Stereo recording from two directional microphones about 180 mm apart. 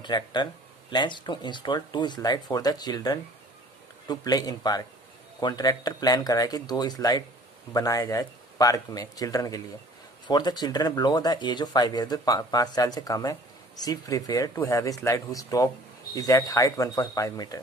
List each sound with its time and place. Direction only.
0.0 s speech: 25° left (ahead or behind)